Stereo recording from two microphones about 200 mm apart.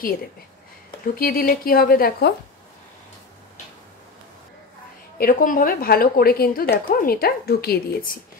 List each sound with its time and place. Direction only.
1.1 s a woman's voice: 45° left (ahead or behind)
5.1 s a woman's voice: 45° left (ahead or behind)